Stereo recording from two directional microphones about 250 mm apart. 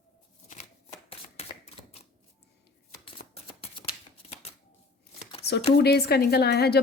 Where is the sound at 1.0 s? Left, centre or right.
Left.